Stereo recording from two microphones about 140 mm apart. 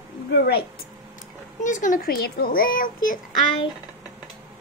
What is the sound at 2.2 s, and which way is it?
Speech, 90° left.